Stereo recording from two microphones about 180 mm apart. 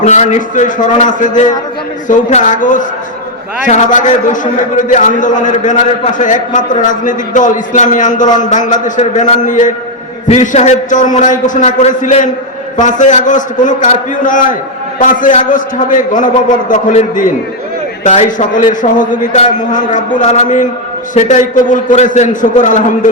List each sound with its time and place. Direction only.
0.0 s a man's voice: 40° left (ahead or behind)